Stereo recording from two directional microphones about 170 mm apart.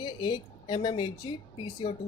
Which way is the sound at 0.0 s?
25° left (ahead or behind).